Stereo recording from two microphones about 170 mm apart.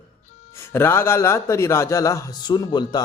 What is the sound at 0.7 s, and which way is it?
Speech, 15° left (ahead or behind).